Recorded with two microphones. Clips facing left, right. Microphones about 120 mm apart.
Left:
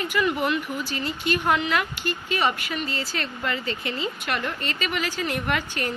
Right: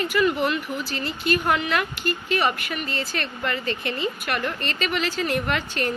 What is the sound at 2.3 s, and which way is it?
A woman's voice, 20° left (ahead or behind).